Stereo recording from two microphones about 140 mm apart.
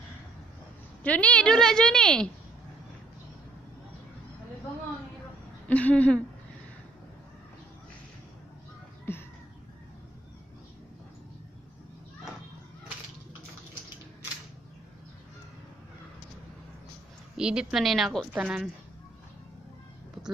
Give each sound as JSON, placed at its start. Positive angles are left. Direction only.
{"t": 1.0, "sound": "a woman's voice", "side_deg": 10}
{"t": 5.7, "sound": "a sound", "side_deg": 10}
{"t": 9.1, "sound": "music", "side_deg": 15}
{"t": 17.4, "sound": "a woman's voice", "side_deg": -5}